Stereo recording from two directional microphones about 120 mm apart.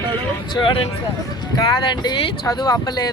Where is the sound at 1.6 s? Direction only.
35° left (ahead or behind).